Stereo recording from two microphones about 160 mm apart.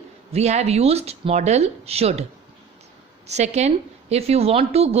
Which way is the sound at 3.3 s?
45° right (ahead or behind).